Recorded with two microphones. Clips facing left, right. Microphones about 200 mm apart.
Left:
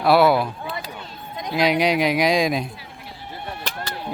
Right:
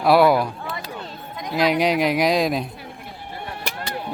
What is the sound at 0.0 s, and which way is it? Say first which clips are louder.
Speech: right 1 dB; 5° left (ahead or behind).